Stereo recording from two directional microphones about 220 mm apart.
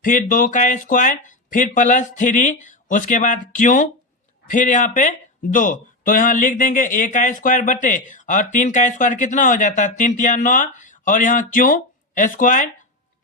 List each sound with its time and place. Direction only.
0.0 s speech: 35° left (ahead or behind)